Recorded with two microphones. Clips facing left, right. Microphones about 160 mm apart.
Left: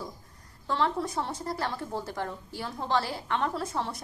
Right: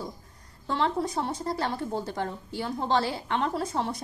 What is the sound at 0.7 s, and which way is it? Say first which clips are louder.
A woman's voice: right 2 dB; 15° right (ahead or behind).